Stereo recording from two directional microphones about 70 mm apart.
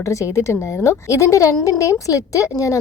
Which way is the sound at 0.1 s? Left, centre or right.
Left.